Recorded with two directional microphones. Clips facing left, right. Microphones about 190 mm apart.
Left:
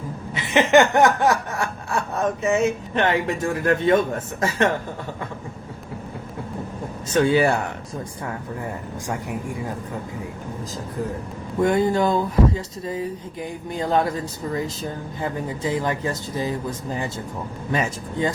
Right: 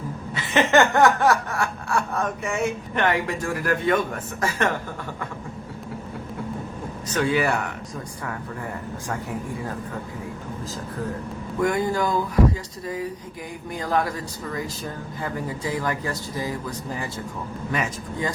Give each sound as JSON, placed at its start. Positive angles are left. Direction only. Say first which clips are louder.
{"t": 0.3, "sound": "snicker", "louder": "left 3 dB", "side_deg": 20}
{"t": 4.4, "sound": "speech", "louder": "left 3 dB", "side_deg": 20}
{"t": 7.1, "sound": "speech", "louder": "left 4 dB", "side_deg": 30}
{"t": 11.6, "sound": "speech", "louder": "left 4 dB", "side_deg": 25}